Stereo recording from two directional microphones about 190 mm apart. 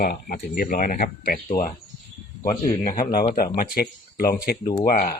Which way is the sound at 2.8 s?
45° left (ahead or behind).